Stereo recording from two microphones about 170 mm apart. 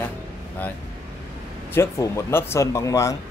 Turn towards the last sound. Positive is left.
turn(degrees=20)  # may be behind; listen again after turning